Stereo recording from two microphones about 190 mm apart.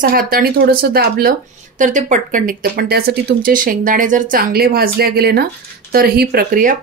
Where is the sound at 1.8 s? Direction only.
40° right (ahead or behind).